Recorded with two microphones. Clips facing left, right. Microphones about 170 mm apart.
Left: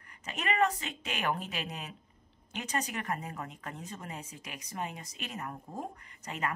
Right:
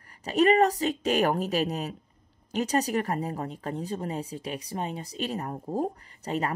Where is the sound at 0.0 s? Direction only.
35° right (ahead or behind).